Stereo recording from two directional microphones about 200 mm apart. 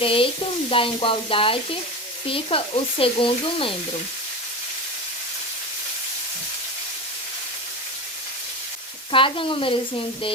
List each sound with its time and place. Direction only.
0.0 s speech: 25° left (ahead or behind)
9.1 s speech: 25° left (ahead or behind)